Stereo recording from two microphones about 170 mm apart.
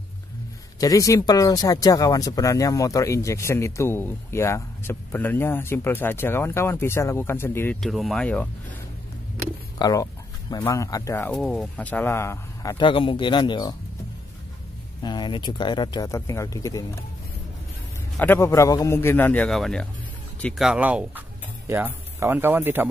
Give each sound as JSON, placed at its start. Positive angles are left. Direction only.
{"t": 0.7, "sound": "speech", "side_deg": 20}
{"t": 7.8, "sound": "speech", "side_deg": 0}
{"t": 9.8, "sound": "speech", "side_deg": 25}
{"t": 11.3, "sound": "speech", "side_deg": 0}
{"t": 15.0, "sound": "speech", "side_deg": 25}
{"t": 18.1, "sound": "speech", "side_deg": 10}
{"t": 20.6, "sound": "speech", "side_deg": -5}